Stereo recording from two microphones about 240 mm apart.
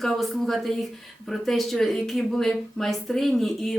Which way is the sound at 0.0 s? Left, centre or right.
Centre.